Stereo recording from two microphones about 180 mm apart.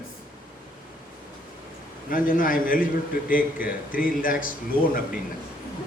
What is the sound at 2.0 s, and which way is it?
A man's voice, 50° left (ahead or behind).